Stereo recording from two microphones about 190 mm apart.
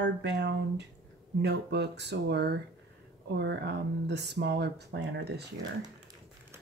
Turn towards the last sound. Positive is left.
turn(degrees=-60)  # may be behind; listen again after turning